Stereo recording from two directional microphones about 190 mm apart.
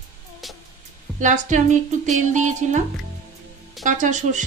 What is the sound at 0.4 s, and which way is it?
Music, centre (ahead or behind).